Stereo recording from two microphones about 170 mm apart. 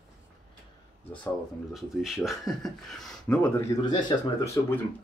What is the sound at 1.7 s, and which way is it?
Speech, centre (ahead or behind).